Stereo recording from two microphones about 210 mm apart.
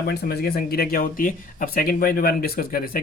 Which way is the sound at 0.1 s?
50° left (ahead or behind).